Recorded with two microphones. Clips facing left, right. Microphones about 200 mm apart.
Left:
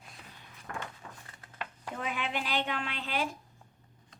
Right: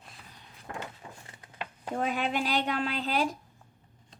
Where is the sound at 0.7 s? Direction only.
20° right (ahead or behind).